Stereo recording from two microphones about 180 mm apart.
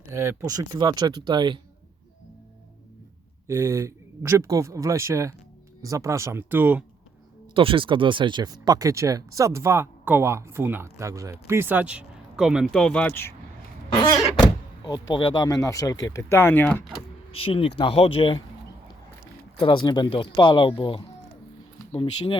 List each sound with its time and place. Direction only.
0.1 s speech: 15° right (ahead or behind)
3.4 s speech: 15° right (ahead or behind)
7.5 s speech: 30° right (ahead or behind); by 13.3 s 10° left (ahead or behind)
13.9 s speech: 20° left (ahead or behind)
17.5 s speech: 30° left (ahead or behind)
19.5 s speech: 25° left (ahead or behind)